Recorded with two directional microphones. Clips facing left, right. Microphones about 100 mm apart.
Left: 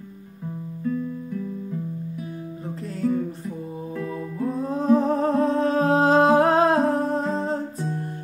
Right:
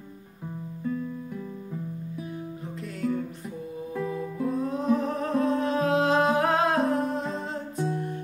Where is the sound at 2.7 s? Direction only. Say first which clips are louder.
Left 5 dB; 35° left (ahead or behind).